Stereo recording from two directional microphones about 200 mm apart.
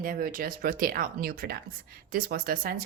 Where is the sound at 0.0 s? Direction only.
45° right (ahead or behind).